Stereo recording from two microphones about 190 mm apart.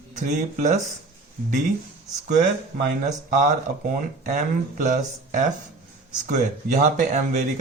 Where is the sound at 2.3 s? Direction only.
45° right (ahead or behind).